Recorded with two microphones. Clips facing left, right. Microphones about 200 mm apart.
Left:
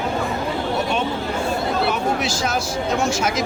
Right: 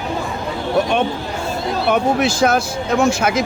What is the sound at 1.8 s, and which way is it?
Speech, 55° right (ahead or behind).